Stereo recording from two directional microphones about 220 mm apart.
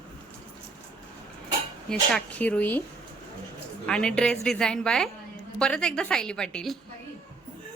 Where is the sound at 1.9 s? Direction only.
5° left (ahead or behind).